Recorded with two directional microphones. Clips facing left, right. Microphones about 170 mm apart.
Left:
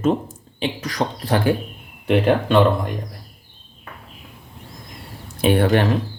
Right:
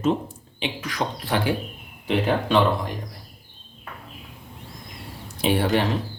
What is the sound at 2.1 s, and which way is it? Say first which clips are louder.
Speech: left 5 dB; 60° left (ahead or behind).